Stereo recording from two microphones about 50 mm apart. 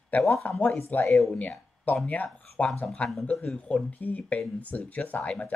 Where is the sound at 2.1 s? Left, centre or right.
Left.